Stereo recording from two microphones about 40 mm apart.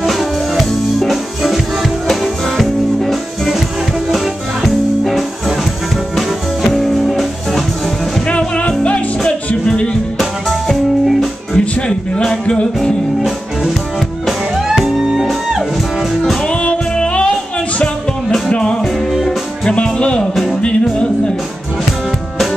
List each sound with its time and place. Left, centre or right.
0.0 s music: centre
4.6 s music: centre
8.3 s music: left
10.1 s music: centre
11.5 s music: centre
15.0 s music: centre
16.4 s music: left
18.5 s music: centre